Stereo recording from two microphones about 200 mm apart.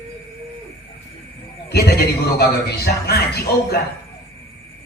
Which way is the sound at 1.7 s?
55° left (ahead or behind).